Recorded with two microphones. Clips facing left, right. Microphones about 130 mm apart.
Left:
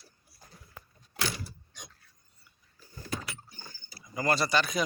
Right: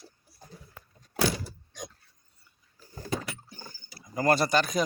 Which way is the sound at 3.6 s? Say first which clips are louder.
Right 3 dB; 45° right (ahead or behind).